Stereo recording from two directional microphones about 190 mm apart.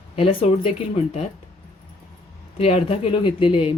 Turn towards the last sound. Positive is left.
turn(degrees=30)  # may be behind; listen again after turning